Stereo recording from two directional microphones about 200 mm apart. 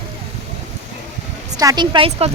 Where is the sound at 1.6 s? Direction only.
20° right (ahead or behind).